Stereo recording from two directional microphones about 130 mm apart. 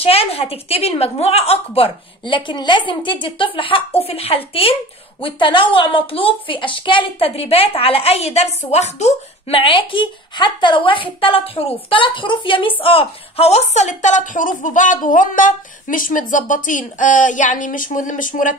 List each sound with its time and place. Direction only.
0.0 s a woman's voice: 50° left (ahead or behind)
9.6 s a woman's voice: 40° left (ahead or behind); by 18.5 s 90° left